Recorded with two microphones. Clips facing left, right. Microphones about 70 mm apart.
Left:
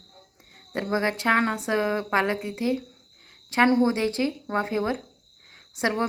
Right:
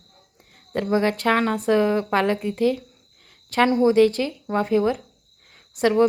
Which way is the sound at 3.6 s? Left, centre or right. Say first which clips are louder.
Right 8 dB; left.